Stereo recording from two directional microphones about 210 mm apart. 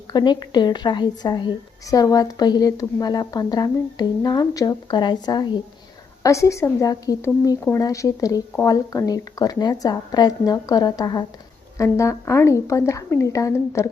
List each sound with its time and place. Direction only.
0.1 s a woman's voice: 20° left (ahead or behind)